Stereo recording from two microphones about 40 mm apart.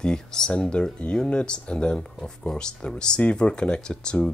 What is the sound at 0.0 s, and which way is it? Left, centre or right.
Speech, centre.